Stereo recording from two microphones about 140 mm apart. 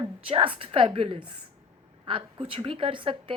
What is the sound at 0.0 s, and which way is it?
Speech, 40° right (ahead or behind).